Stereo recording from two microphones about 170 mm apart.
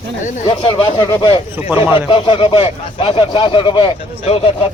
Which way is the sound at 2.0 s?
30° left (ahead or behind).